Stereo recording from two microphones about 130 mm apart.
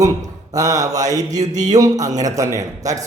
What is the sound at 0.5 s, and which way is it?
Speech, 25° right (ahead or behind).